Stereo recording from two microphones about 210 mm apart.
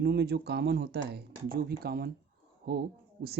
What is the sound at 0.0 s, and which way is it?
Mantra, 50° right (ahead or behind).